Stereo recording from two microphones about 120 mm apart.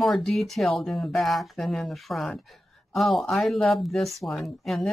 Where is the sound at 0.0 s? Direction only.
Centre (ahead or behind).